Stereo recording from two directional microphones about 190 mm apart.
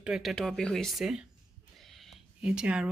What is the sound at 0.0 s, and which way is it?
Speech, 5° right (ahead or behind).